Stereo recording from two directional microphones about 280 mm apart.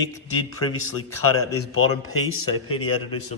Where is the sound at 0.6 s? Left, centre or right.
Left.